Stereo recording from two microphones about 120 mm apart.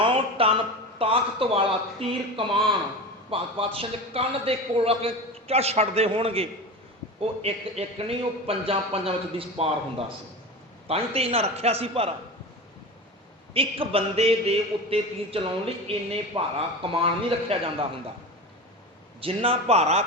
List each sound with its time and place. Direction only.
0.0 s a man's voice: 50° right (ahead or behind)
10.8 s a man's voice: 55° right (ahead or behind)
13.5 s a man's voice: 50° right (ahead or behind)
19.2 s a man's voice: 50° right (ahead or behind)